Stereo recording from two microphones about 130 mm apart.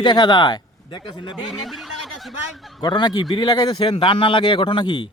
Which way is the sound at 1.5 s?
Centre (ahead or behind).